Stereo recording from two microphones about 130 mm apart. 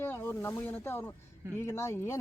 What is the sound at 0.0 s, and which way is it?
Speech, 15° left (ahead or behind).